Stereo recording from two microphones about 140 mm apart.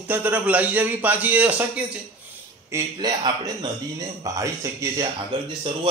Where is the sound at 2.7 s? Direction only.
20° right (ahead or behind).